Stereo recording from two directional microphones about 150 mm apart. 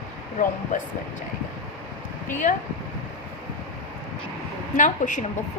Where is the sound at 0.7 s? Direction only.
55° left (ahead or behind).